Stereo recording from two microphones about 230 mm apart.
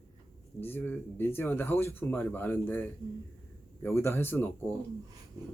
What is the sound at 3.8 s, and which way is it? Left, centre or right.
Speech, centre.